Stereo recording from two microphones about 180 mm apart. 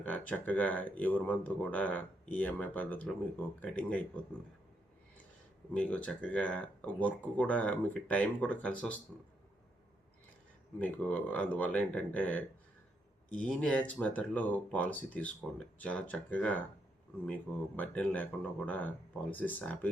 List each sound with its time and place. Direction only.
0.0 s speech: 10° left (ahead or behind)
5.7 s speech: 5° left (ahead or behind)
10.8 s speech: 10° left (ahead or behind)
17.7 s speech: 10° left (ahead or behind)